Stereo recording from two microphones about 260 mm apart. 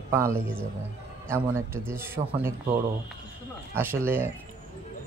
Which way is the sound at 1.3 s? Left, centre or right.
Centre.